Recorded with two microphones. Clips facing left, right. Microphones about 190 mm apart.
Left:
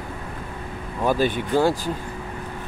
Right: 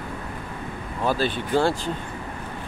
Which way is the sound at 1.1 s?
15° left (ahead or behind).